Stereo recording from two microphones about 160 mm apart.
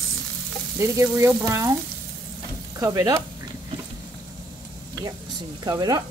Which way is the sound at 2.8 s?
20° right (ahead or behind).